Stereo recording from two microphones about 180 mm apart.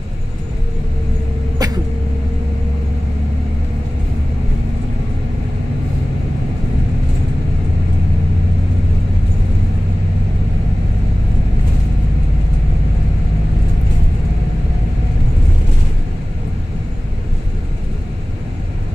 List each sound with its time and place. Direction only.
1.6 s vehicle: 20° right (ahead or behind)